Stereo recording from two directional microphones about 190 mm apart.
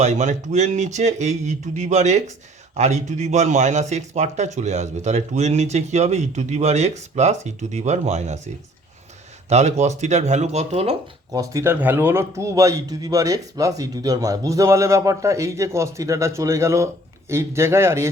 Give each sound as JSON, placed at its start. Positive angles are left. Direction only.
{"t": 0.0, "sound": "a man's voice", "side_deg": -40}
{"t": 9.5, "sound": "a man's voice", "side_deg": -35}
{"t": 11.3, "sound": "a man's voice", "side_deg": -15}